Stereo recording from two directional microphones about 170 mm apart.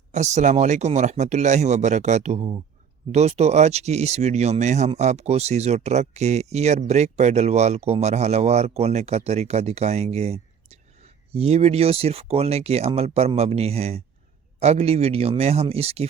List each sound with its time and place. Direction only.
0.1 s speech: 45° right (ahead or behind)